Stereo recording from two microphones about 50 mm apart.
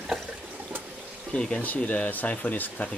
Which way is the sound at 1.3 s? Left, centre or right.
Centre.